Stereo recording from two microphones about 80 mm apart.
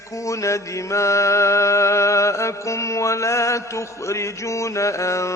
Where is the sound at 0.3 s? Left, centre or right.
Left.